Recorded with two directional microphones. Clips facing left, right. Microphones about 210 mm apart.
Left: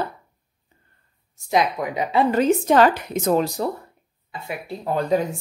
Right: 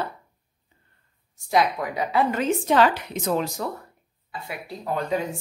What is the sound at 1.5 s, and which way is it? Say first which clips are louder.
Speech: left 1 dB; 20° left (ahead or behind).